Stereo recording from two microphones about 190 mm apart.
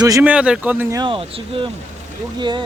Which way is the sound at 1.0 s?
25° right (ahead or behind).